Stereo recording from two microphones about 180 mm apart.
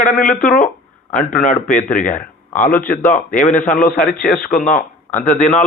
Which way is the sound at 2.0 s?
45° left (ahead or behind).